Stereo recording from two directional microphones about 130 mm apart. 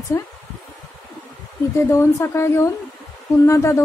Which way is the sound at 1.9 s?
20° left (ahead or behind).